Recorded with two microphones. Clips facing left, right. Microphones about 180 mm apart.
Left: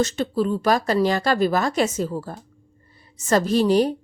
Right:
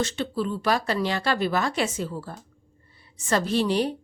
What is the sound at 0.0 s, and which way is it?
A woman's voice, 40° left (ahead or behind).